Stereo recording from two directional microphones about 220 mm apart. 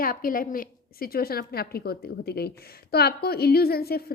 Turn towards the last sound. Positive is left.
turn(degrees=45)  # may be behind; listen again after turning